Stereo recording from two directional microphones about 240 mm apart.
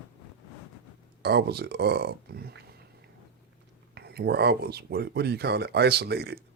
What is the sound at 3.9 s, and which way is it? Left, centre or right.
Speech, right.